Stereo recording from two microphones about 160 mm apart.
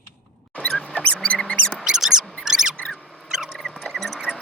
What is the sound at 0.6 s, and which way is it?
Squeak, 5° left (ahead or behind).